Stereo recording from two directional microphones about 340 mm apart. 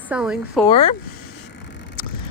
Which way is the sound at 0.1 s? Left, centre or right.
Centre.